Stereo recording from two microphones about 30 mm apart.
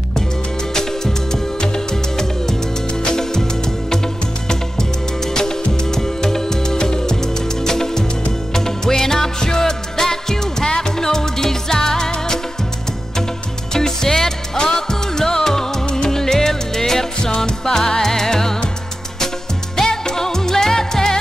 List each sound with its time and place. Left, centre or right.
0.7 s music: centre
3.0 s music: left
5.2 s music: centre
13.7 s music: centre
19.9 s music: centre